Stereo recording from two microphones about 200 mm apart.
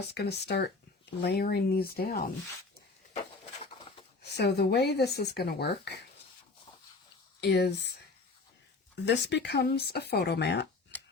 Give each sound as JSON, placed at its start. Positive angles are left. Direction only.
{"t": 0.1, "sound": "speech", "side_deg": 55}
{"t": 4.2, "sound": "speech", "side_deg": 55}
{"t": 7.4, "sound": "speech", "side_deg": 55}
{"t": 9.0, "sound": "speech", "side_deg": 55}